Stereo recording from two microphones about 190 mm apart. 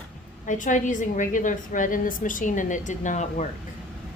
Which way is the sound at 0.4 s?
40° left (ahead or behind).